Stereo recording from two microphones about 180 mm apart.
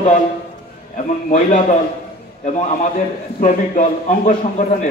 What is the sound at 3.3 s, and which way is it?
A man's voice, 45° left (ahead or behind).